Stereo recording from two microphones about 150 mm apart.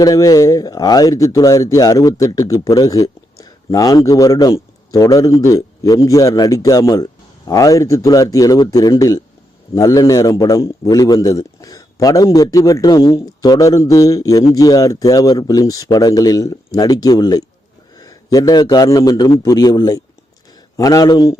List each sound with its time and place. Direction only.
0.0 s speech: 25° left (ahead or behind)